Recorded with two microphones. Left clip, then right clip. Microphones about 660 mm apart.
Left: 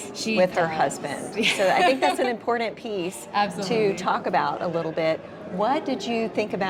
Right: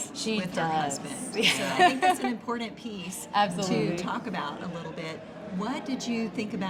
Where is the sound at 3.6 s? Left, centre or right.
Left.